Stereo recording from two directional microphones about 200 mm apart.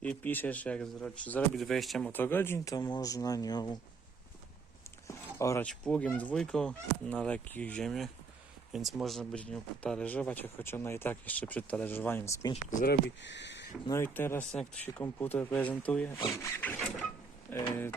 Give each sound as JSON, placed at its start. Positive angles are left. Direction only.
{"t": 0.0, "sound": "speech", "side_deg": 10}
{"t": 5.0, "sound": "speech", "side_deg": 15}
{"t": 12.8, "sound": "speech", "side_deg": 55}
{"t": 13.8, "sound": "speech", "side_deg": 10}